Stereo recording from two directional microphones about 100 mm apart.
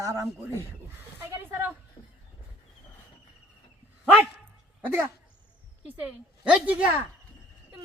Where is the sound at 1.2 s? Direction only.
20° right (ahead or behind).